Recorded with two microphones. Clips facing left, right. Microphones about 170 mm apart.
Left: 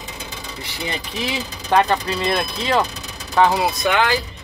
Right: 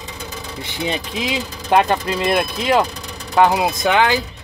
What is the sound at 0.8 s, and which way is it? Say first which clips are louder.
Speech: right 3 dB; 15° right (ahead or behind).